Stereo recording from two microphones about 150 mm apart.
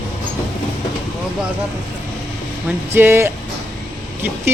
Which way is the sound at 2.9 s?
15° right (ahead or behind).